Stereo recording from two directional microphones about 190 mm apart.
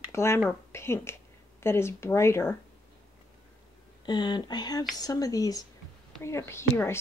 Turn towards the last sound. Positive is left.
turn(degrees=15)  # may be behind; listen again after turning